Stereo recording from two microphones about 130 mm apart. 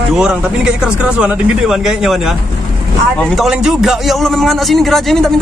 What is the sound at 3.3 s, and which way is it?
A man's voice, 5° right (ahead or behind).